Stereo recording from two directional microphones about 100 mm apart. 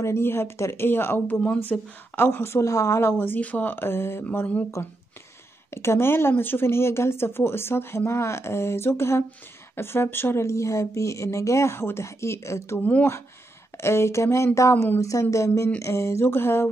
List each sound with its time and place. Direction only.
0.0 s speech: 25° left (ahead or behind)
5.7 s speech: 25° left (ahead or behind)